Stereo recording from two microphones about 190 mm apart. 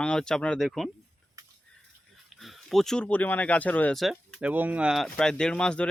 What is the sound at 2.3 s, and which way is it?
Speech, centre (ahead or behind).